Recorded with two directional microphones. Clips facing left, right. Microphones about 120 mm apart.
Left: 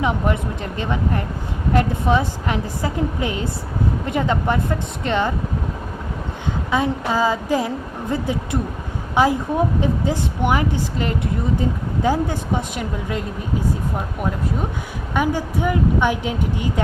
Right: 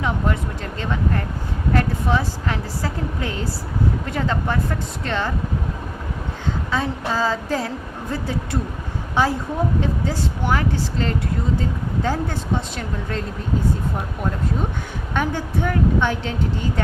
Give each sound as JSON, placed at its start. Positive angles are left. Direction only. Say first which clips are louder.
{"t": 0.0, "sound": "speech", "louder": "left 3 dB", "side_deg": 20}
{"t": 6.7, "sound": "speech", "louder": "left 5 dB", "side_deg": 15}
{"t": 9.1, "sound": "speech", "louder": "left 3 dB", "side_deg": 15}
{"t": 15.1, "sound": "speech", "louder": "left 3 dB", "side_deg": 10}